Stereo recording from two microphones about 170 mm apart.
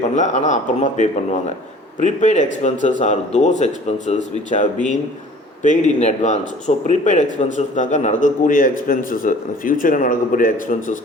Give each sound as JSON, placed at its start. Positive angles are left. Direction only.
{"t": 0.1, "sound": "speech", "side_deg": 45}